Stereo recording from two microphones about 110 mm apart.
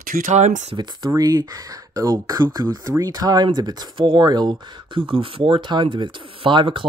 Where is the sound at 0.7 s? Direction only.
40° right (ahead or behind).